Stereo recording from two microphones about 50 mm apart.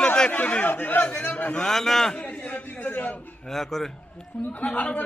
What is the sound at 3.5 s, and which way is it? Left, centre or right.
Speech, centre.